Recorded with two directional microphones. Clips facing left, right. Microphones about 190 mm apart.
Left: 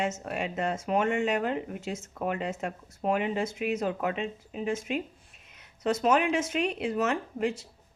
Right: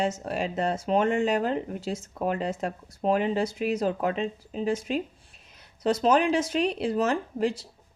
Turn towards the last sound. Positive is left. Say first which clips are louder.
# right 3 dB
turn(degrees=-35)  # may be behind; listen again after turning